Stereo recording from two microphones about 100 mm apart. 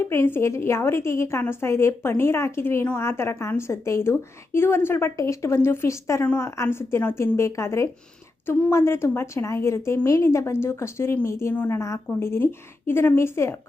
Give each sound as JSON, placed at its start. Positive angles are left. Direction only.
{"t": 0.0, "sound": "a woman's voice", "side_deg": 25}